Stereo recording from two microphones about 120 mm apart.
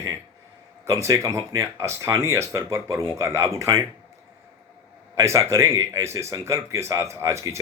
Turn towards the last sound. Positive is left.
turn(degrees=-25)  # may be behind; listen again after turning